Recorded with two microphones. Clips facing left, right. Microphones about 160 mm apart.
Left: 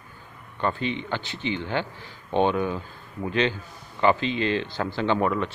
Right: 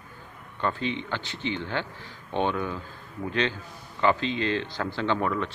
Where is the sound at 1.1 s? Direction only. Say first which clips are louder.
Left 2 dB; 10° left (ahead or behind).